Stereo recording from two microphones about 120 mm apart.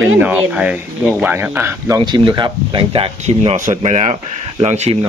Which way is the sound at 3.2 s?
80° right.